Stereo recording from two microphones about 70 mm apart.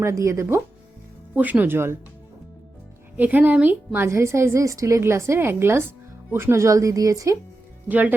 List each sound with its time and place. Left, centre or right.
0.0 s speech: right
1.4 s a woman's voice: right
3.2 s a woman's voice: right
4.1 s a woman's voice: right
7.9 s a woman's voice: right